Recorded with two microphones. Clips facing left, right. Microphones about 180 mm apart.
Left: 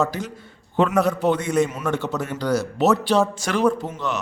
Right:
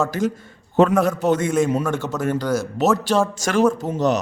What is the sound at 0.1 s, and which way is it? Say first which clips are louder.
A man's voice: right 8 dB; 45° right (ahead or behind).